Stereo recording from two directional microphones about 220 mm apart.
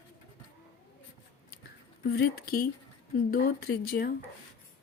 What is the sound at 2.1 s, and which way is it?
Speech, 45° left (ahead or behind).